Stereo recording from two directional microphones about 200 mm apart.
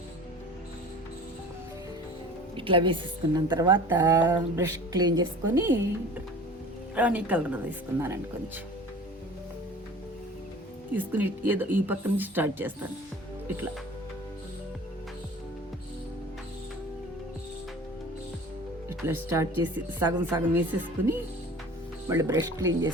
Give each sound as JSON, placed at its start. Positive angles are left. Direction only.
{"t": 2.6, "sound": "a woman's voice", "side_deg": -25}
{"t": 6.9, "sound": "speech", "side_deg": -10}
{"t": 10.9, "sound": "speech", "side_deg": -10}
{"t": 18.9, "sound": "speech", "side_deg": -10}